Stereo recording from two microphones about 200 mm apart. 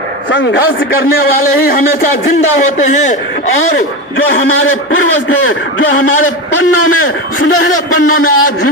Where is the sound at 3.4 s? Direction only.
85° left.